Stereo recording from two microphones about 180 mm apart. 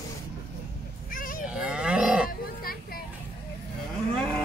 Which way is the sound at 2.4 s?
55° left (ahead or behind).